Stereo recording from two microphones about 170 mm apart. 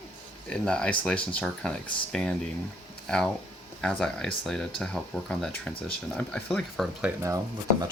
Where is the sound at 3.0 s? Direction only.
5° left (ahead or behind).